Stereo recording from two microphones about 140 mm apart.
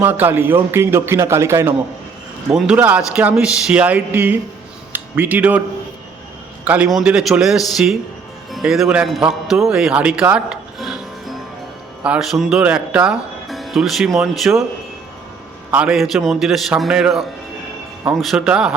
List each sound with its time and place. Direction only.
0.0 s a man's voice: 15° right (ahead or behind)
2.5 s a man's voice: 5° right (ahead or behind)
6.7 s a man's voice: 5° right (ahead or behind)
15.7 s a man's voice: 5° right (ahead or behind)